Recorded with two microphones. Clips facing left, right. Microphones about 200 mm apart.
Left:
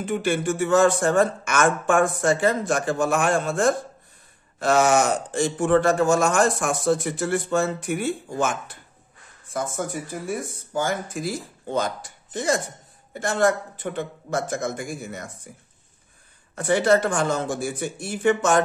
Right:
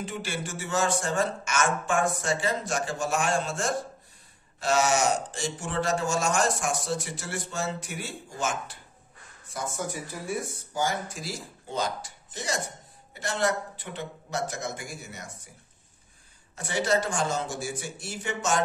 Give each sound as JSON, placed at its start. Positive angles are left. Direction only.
{"t": 0.0, "sound": "speech", "side_deg": 55}
{"t": 16.5, "sound": "speech", "side_deg": 55}